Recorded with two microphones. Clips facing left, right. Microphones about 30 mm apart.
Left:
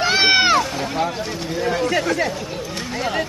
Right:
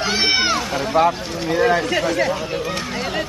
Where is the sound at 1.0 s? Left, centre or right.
Right.